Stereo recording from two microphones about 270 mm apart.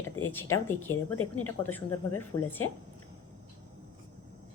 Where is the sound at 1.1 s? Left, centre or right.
Left.